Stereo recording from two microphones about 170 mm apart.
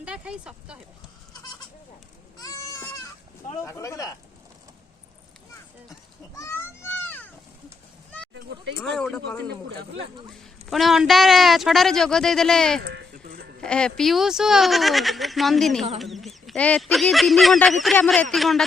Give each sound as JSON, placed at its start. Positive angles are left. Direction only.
{"t": 0.0, "sound": "speech", "side_deg": -5}
{"t": 2.4, "sound": "a sound", "side_deg": 20}
{"t": 3.6, "sound": "speech", "side_deg": 15}
{"t": 6.3, "sound": "a sound", "side_deg": 15}
{"t": 9.0, "sound": "speech", "side_deg": 5}
{"t": 10.7, "sound": "speech", "side_deg": 0}
{"t": 12.8, "sound": "speech", "side_deg": -85}
{"t": 13.6, "sound": "speech", "side_deg": 5}